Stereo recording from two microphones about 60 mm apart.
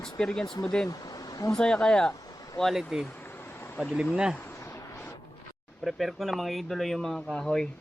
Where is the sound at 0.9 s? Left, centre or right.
Left.